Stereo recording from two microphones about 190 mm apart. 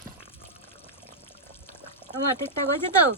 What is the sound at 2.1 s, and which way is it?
Pour, 35° right (ahead or behind).